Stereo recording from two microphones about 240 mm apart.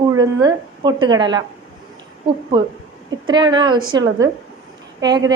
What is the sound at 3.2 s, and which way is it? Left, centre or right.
A woman's voice, centre.